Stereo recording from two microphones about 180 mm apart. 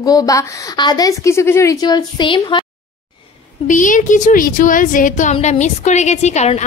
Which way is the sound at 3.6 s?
45° left (ahead or behind).